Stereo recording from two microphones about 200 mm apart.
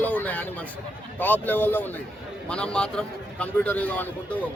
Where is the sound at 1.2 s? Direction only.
10° left (ahead or behind).